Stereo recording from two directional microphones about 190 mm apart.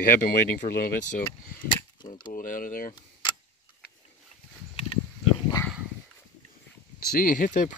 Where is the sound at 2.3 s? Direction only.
45° left (ahead or behind).